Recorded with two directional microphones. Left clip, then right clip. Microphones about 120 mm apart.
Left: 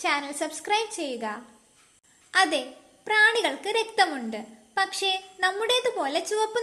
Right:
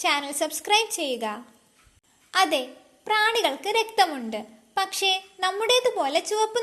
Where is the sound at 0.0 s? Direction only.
45° right (ahead or behind).